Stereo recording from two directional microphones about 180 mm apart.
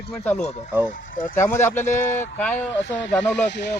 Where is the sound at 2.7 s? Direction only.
85° left.